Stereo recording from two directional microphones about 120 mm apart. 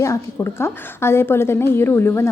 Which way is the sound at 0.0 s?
25° left (ahead or behind).